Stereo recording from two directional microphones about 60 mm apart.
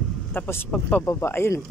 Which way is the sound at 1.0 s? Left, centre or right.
Left.